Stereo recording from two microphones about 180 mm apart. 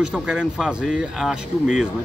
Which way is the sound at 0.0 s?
5° right (ahead or behind).